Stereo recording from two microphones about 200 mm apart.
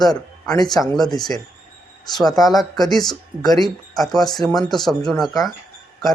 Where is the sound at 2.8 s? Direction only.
20° left (ahead or behind).